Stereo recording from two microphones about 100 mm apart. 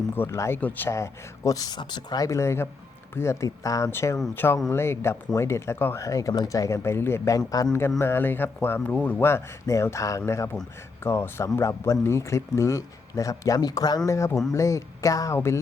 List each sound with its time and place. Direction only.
0.2 s speech: 25° left (ahead or behind)
7.3 s speech: 35° left (ahead or behind)
7.8 s speech: 25° left (ahead or behind)
9.2 s speech: 30° left (ahead or behind)